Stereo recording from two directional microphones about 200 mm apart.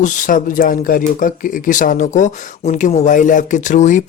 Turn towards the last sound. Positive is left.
turn(degrees=40)  # may be behind; listen again after turning